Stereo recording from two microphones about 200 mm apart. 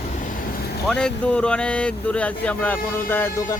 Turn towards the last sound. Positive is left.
turn(degrees=15)  # may be behind; listen again after turning